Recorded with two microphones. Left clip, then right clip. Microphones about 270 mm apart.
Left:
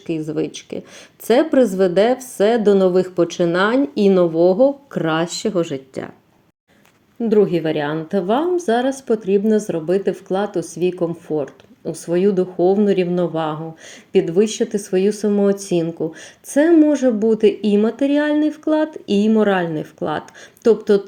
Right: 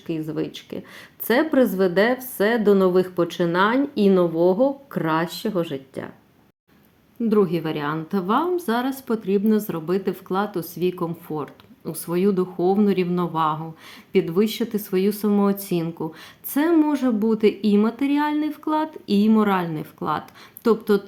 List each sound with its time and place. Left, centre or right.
0.1 s speech: centre
7.2 s speech: centre
14.4 s speech: right
15.3 s speech: centre
15.5 s speech: right
15.8 s speech: centre
18.9 s speech: right
19.3 s speech: centre